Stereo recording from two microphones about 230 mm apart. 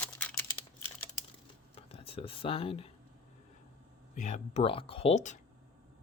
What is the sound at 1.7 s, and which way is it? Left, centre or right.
Speech, left.